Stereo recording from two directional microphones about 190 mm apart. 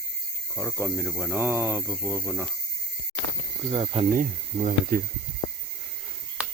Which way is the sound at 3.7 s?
30° right (ahead or behind).